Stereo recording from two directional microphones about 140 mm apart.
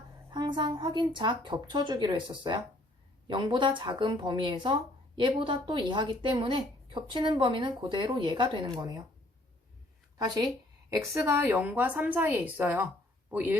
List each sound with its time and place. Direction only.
0.3 s speech: 35° right (ahead or behind)
10.2 s a woman's voice: 30° right (ahead or behind); by 13.6 s 10° right (ahead or behind)